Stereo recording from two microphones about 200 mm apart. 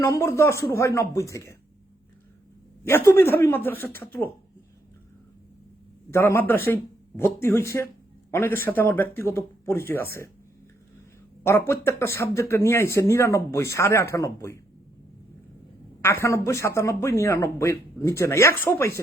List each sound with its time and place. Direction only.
0.0 s speech: 15° left (ahead or behind)
2.8 s speech: 10° left (ahead or behind)
6.1 s speech: 10° left (ahead or behind)
11.4 s speech: 15° left (ahead or behind)
16.0 s speech: 10° left (ahead or behind)